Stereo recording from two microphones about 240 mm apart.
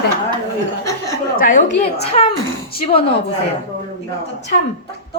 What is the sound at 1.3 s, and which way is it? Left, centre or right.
Speech, left.